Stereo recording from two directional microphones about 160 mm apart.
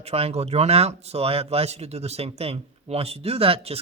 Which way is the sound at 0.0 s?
40° right (ahead or behind).